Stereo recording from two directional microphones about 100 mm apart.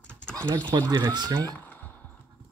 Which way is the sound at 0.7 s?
45° right (ahead or behind).